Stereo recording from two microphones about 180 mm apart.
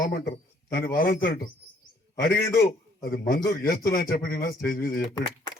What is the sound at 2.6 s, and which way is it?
A man's voice, 60° left (ahead or behind).